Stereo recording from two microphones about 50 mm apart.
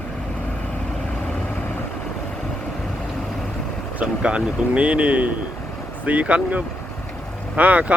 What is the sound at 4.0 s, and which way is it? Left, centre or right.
Speech, right.